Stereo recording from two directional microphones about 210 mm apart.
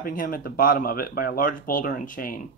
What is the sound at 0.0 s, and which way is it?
Speech, 40° left (ahead or behind).